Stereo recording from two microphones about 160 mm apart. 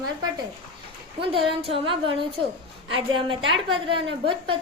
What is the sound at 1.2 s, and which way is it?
A woman's voice, 35° right (ahead or behind).